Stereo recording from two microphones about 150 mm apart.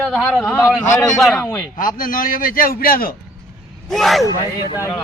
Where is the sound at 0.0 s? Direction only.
5° left (ahead or behind).